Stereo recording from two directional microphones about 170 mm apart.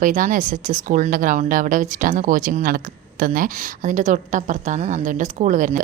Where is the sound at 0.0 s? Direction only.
50° right (ahead or behind).